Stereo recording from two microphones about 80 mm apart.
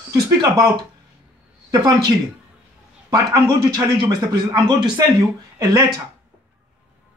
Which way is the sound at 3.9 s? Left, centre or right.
Right.